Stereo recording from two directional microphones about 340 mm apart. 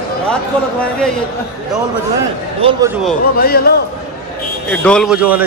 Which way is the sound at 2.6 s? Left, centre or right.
Centre.